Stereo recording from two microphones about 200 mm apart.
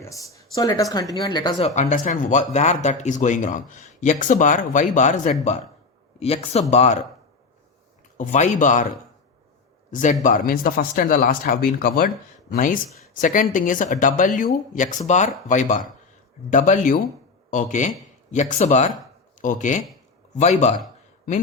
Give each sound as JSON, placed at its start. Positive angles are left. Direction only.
{"t": 0.0, "sound": "speech", "side_deg": 15}
{"t": 8.2, "sound": "speech", "side_deg": 40}
{"t": 9.9, "sound": "speech", "side_deg": 40}